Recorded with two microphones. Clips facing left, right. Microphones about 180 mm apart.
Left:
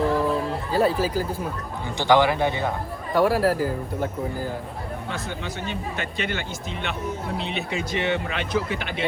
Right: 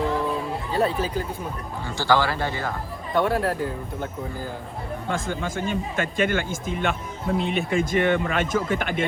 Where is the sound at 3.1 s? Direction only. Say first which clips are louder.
Left 3 dB; 5° left (ahead or behind).